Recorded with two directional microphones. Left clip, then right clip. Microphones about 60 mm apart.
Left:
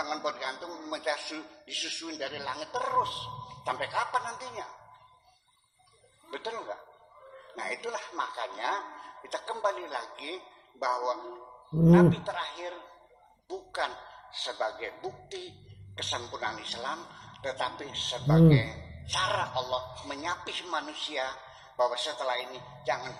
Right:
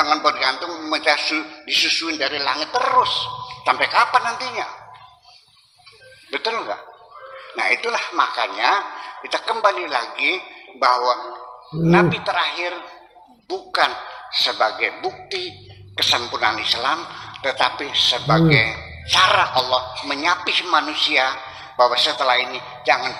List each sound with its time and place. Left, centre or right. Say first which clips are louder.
0.0 s a man's voice: right 16 dB; right
6.3 s a man's voice: right 13 dB; right